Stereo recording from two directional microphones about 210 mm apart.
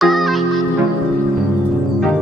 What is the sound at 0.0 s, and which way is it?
Music, centre (ahead or behind).